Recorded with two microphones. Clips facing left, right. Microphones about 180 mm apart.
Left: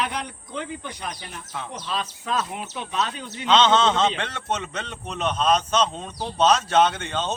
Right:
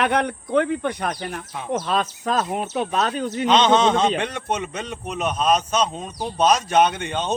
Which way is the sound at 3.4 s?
15° right (ahead or behind).